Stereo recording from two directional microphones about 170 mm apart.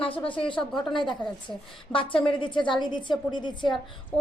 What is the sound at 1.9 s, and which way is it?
A woman's voice, 30° left (ahead or behind).